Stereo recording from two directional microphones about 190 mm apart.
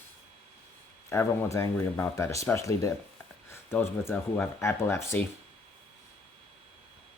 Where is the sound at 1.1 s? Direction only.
15° left (ahead or behind).